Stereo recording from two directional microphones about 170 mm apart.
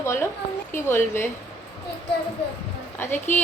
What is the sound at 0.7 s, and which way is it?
Speech, 15° left (ahead or behind).